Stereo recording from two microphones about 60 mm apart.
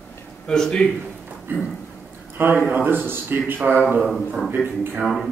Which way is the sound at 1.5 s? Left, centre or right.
Right.